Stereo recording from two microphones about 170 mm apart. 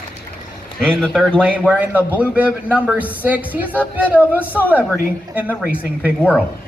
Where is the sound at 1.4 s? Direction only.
10° right (ahead or behind).